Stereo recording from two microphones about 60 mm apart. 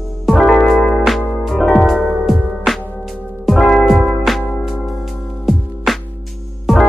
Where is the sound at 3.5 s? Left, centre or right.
Centre.